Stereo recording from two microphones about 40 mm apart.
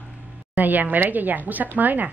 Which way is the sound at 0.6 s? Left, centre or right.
Right.